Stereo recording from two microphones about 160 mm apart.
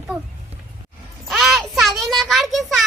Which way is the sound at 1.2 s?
Centre (ahead or behind).